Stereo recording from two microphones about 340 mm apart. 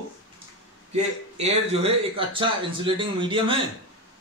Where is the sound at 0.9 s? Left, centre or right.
Centre.